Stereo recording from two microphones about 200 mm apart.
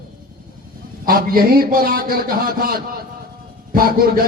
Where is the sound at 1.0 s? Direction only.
45° right (ahead or behind).